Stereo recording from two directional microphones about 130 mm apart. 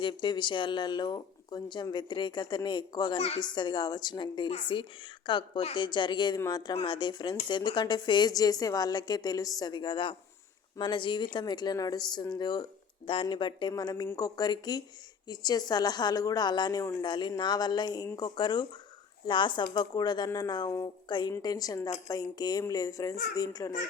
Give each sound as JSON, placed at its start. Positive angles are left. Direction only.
{"t": 0.0, "sound": "speech", "side_deg": 35}
{"t": 3.2, "sound": "a woman's voice", "side_deg": 50}
{"t": 3.4, "sound": "speech", "side_deg": 35}